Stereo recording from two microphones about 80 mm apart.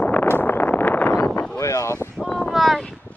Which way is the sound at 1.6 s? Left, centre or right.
Left.